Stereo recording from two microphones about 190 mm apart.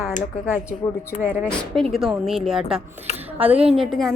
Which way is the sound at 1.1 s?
40° left (ahead or behind).